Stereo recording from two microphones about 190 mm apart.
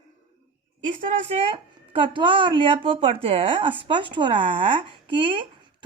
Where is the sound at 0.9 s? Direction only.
40° right (ahead or behind).